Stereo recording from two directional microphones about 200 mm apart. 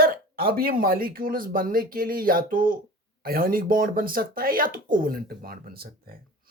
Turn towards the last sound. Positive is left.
turn(degrees=-50)  # may be behind; listen again after turning